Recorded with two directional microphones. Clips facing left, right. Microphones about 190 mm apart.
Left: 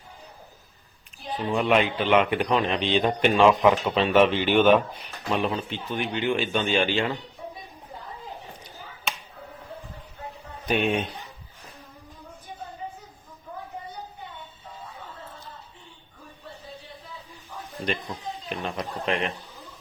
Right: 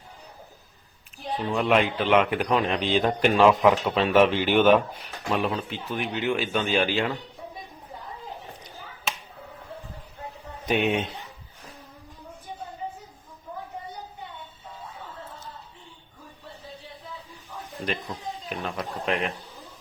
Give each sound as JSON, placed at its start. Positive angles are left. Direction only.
{"t": 1.5, "sound": "a man's voice", "side_deg": 0}
{"t": 10.9, "sound": "speech", "side_deg": -25}
{"t": 17.8, "sound": "a man's voice", "side_deg": 0}